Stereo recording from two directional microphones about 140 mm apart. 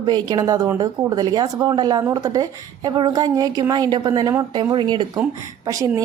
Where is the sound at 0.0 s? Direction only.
30° right (ahead or behind).